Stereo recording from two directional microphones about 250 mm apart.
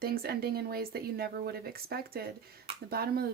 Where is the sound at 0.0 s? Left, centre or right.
Right.